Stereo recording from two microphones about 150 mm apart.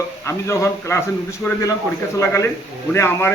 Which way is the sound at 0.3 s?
20° left (ahead or behind).